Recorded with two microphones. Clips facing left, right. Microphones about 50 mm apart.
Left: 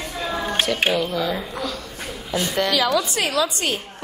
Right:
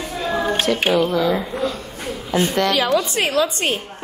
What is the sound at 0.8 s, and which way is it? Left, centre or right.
Speech, centre.